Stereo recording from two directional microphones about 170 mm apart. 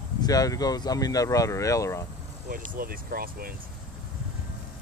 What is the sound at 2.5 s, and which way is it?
Speech, 60° right (ahead or behind).